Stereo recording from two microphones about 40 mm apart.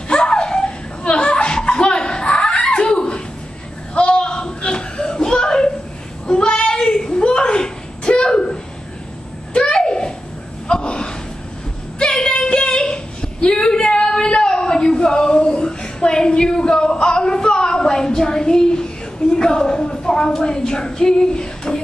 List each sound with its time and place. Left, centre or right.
0.1 s chuckle: left
6.2 s a sound: left
10.7 s gasp: left
12.1 s female singing: left